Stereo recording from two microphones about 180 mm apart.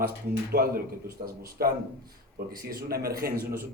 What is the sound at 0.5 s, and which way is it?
A man's voice, 55° right (ahead or behind).